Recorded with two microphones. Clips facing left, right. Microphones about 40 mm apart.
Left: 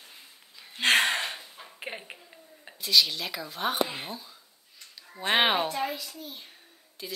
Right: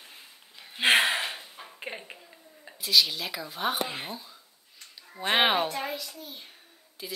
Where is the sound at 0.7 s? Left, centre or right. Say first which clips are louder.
Right 1 dB; centre.